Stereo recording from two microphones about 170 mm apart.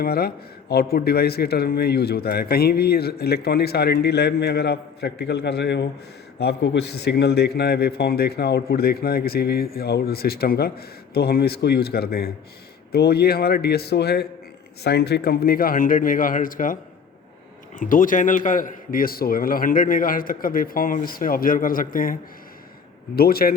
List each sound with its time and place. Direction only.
0.0 s a man's voice: 65° left (ahead or behind)
17.7 s a man's voice: 55° left (ahead or behind)